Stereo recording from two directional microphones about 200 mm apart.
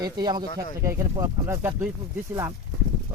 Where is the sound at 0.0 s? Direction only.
20° right (ahead or behind).